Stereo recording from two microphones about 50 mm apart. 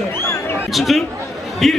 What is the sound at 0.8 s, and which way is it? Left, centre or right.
Speech, centre.